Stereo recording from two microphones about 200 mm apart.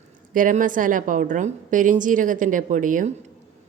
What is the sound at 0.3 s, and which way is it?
A woman's voice, 40° right (ahead or behind).